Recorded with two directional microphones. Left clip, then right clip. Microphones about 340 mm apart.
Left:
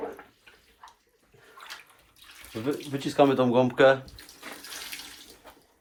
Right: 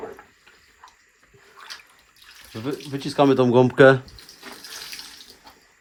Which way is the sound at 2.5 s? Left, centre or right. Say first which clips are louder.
Right 1 dB; centre.